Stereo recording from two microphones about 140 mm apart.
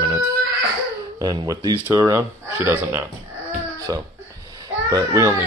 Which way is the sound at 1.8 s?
20° right (ahead or behind).